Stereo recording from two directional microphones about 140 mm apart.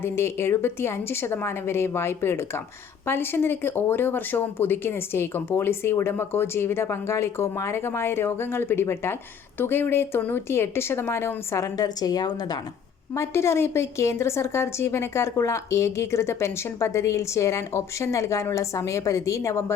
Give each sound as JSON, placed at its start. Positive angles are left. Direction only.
{"t": 0.0, "sound": "a woman's voice", "side_deg": 20}